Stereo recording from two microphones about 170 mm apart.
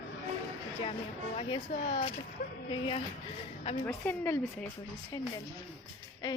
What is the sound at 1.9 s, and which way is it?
Speech, 35° left (ahead or behind).